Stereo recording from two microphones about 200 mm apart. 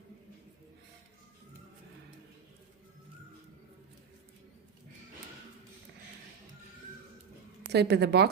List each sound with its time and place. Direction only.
7.7 s a woman's voice: 55° right (ahead or behind)